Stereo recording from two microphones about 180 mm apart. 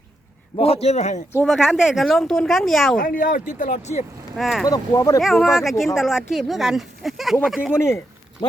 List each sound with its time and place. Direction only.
0.5 s a man's voice: 35° left (ahead or behind)
1.5 s speech: centre (ahead or behind)
3.0 s speech: 50° left (ahead or behind)
4.4 s speech: centre (ahead or behind)
4.6 s speech: 20° left (ahead or behind)
5.2 s speech: centre (ahead or behind)
7.7 s a man's voice: 15° left (ahead or behind)